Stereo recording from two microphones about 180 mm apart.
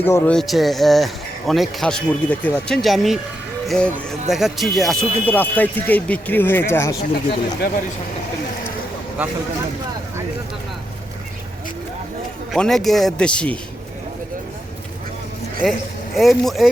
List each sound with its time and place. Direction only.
0.0 s speech: 10° left (ahead or behind)
7.6 s speech: 55° left (ahead or behind)
12.5 s speech: centre (ahead or behind)
15.6 s speech: centre (ahead or behind)